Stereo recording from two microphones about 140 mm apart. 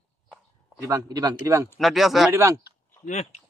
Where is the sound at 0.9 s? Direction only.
25° right (ahead or behind).